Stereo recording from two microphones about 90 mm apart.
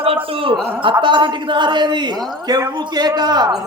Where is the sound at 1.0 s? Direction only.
60° right (ahead or behind).